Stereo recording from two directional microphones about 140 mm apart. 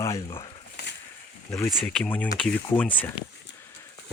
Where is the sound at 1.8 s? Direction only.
10° left (ahead or behind).